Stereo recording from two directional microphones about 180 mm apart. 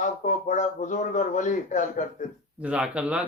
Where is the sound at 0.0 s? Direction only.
45° left (ahead or behind).